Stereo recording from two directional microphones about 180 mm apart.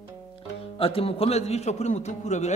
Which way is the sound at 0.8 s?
30° left (ahead or behind).